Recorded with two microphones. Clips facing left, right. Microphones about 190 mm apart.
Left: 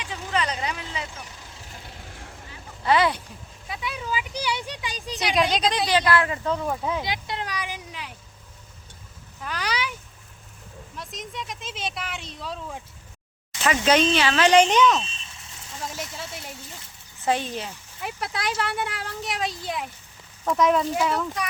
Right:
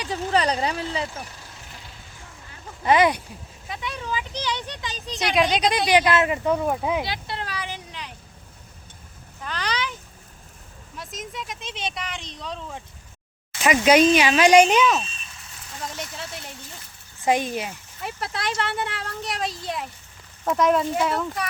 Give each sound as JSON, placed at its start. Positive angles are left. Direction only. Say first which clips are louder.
{"t": 0.0, "sound": "speech", "louder": "right 5 dB", "side_deg": -35}
{"t": 2.8, "sound": "speech", "louder": "right 3 dB", "side_deg": -20}
{"t": 3.7, "sound": "speech", "louder": "even", "side_deg": 5}
{"t": 5.2, "sound": "speech", "louder": "right 2 dB", "side_deg": 0}
{"t": 7.0, "sound": "a sound", "louder": "even", "side_deg": 15}
{"t": 9.4, "sound": "a sound", "louder": "even", "side_deg": 10}
{"t": 10.9, "sound": "speech", "louder": "right 1 dB", "side_deg": 0}
{"t": 13.6, "sound": "speech", "louder": "right 4 dB", "side_deg": -10}
{"t": 15.8, "sound": "speech", "louder": "even", "side_deg": 0}
{"t": 17.2, "sound": "speech", "louder": "right 3 dB", "side_deg": -15}
{"t": 18.0, "sound": "speech", "louder": "even", "side_deg": 0}